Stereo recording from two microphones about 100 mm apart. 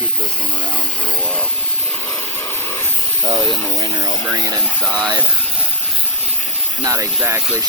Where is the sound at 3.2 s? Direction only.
55° right (ahead or behind).